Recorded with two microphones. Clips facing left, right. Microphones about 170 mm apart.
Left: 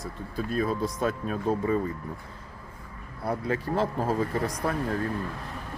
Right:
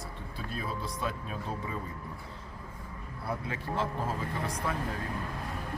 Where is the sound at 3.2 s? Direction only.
40° left (ahead or behind).